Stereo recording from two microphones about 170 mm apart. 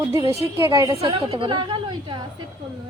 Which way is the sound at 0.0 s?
20° right (ahead or behind).